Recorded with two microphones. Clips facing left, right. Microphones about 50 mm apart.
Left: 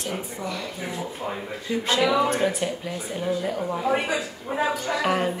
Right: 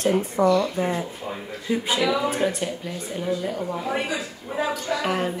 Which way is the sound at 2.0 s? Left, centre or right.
Centre.